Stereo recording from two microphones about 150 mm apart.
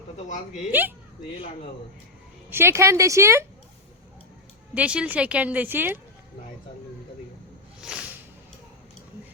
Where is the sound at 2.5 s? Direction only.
15° right (ahead or behind).